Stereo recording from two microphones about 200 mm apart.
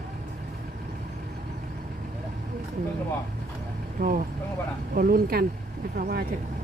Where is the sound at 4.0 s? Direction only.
45° right (ahead or behind).